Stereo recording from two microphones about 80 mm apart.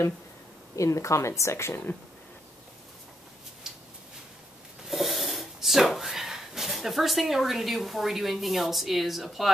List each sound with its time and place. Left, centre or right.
0.7 s a woman's voice: left
4.8 s speech: centre